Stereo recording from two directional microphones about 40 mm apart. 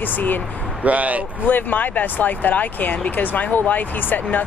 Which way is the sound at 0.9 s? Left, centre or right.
Right.